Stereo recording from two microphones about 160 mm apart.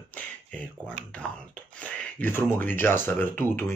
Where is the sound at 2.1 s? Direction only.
15° left (ahead or behind).